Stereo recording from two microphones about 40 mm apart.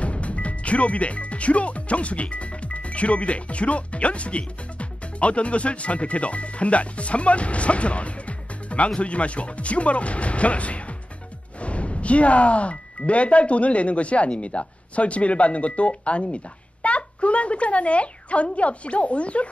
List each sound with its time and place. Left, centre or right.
0.0 s speech: left